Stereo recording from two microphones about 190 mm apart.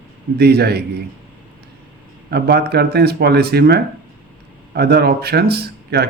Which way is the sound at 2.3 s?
55° right (ahead or behind).